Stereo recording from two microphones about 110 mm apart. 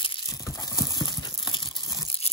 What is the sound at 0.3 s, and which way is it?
Crumpling, 30° left (ahead or behind).